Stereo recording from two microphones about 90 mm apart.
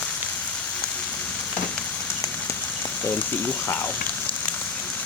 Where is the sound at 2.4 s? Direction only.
25° left (ahead or behind).